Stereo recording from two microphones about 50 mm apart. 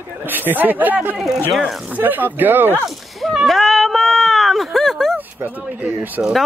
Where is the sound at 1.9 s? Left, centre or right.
Right.